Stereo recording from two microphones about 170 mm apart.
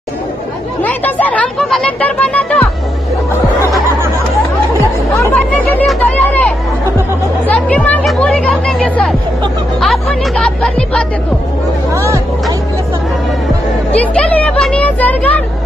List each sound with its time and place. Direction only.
0.8 s music: 10° left (ahead or behind)
5.2 s chatter: 10° left (ahead or behind)
7.4 s speech: 10° left (ahead or behind)
11.9 s speech: 20° right (ahead or behind)
13.9 s speech: 5° left (ahead or behind)